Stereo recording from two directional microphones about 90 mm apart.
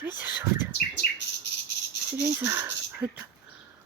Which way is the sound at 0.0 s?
20° right (ahead or behind).